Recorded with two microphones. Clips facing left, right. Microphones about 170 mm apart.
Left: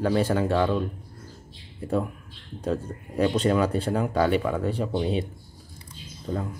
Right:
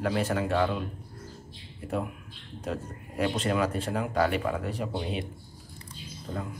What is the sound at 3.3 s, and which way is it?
Speech, 35° left (ahead or behind).